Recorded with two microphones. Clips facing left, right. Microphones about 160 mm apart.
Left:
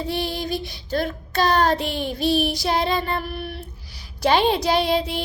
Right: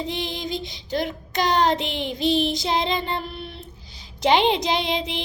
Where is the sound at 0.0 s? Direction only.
20° right (ahead or behind).